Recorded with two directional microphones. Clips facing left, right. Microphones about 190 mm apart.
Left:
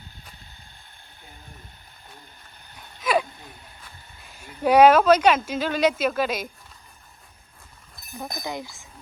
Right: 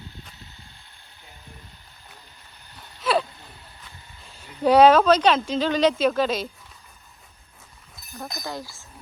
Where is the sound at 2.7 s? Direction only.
10° left (ahead or behind).